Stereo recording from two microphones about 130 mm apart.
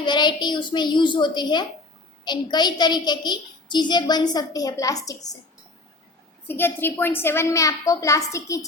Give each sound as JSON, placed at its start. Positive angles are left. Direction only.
{"t": 0.0, "sound": "a woman's voice", "side_deg": 35}
{"t": 6.5, "sound": "a woman's voice", "side_deg": 15}